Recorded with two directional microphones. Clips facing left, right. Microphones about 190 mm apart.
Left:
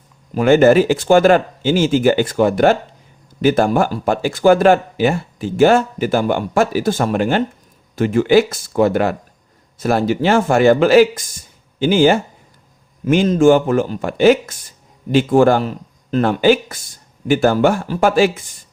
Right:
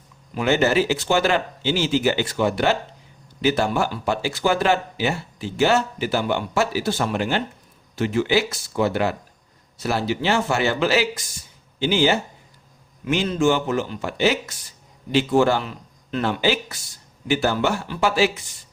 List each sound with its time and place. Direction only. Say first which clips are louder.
0.3 s speech: left 9 dB; 50° left (ahead or behind)